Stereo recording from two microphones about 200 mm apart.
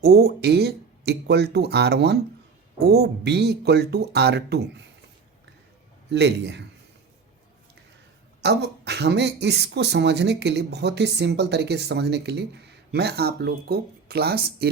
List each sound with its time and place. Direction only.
0.0 s speech: 50° right (ahead or behind)
6.1 s speech: 55° right (ahead or behind)
8.4 s speech: 55° right (ahead or behind)